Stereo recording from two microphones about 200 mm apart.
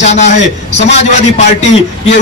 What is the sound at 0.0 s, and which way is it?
Speech, 35° left (ahead or behind).